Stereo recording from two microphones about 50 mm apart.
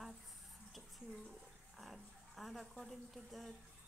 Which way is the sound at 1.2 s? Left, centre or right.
Centre.